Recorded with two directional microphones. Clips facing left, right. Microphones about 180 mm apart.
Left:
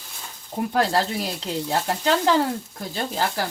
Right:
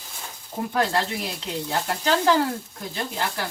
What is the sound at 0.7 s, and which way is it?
Speech, 35° left (ahead or behind).